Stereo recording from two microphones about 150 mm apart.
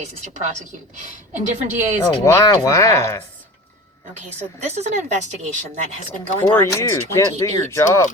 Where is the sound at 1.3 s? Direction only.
55° right (ahead or behind).